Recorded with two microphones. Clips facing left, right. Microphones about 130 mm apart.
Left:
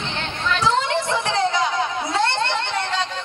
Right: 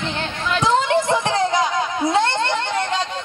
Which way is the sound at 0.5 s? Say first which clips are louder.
Right 3 dB; 20° right (ahead or behind).